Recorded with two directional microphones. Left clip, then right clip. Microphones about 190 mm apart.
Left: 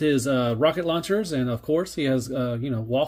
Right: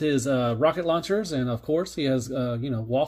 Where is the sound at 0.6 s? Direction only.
15° left (ahead or behind).